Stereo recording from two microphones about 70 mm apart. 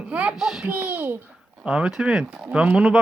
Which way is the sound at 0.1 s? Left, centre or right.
Centre.